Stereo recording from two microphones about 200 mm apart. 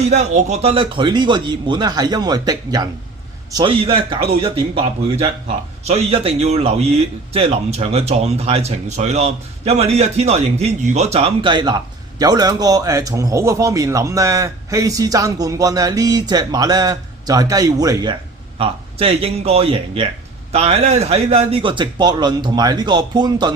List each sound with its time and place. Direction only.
0.1 s a man's voice: 40° right (ahead or behind)
5.9 s a man's voice: 30° right (ahead or behind)